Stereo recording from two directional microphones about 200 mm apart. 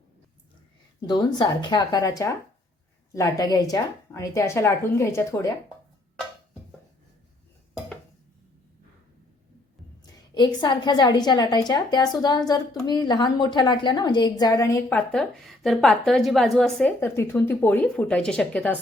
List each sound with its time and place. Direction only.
1.0 s a woman's voice: 20° left (ahead or behind)
10.3 s a woman's voice: 20° left (ahead or behind)